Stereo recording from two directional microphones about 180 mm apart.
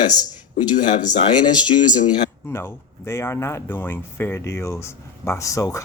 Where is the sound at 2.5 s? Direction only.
15° left (ahead or behind).